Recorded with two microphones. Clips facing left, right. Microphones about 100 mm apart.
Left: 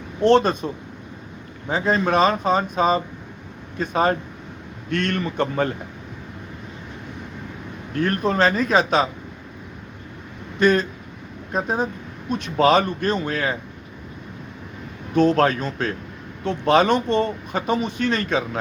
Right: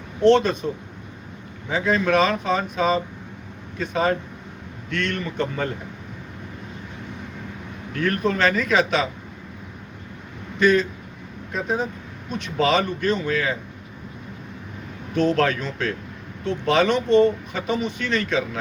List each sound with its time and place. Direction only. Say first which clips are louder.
0.3 s speech: even; 45° left (ahead or behind)
1.7 s speech: even; 35° left (ahead or behind)
7.9 s speech: left 2 dB; 35° left (ahead or behind)
10.6 s speech: even; 45° left (ahead or behind)
15.1 s speech: left 3 dB; 40° left (ahead or behind)